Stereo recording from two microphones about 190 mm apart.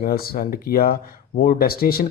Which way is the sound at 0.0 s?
50° left (ahead or behind).